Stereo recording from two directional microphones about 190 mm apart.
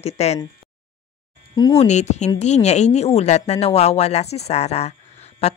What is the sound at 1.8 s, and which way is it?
Speech, 35° left (ahead or behind).